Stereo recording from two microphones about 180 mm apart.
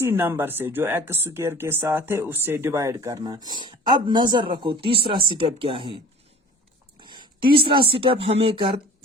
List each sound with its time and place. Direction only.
0.0 s speech: 15° right (ahead or behind); by 6.0 s 30° right (ahead or behind)
7.0 s speech: 25° right (ahead or behind)